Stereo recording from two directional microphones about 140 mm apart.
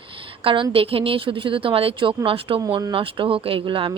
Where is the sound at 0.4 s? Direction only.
40° right (ahead or behind).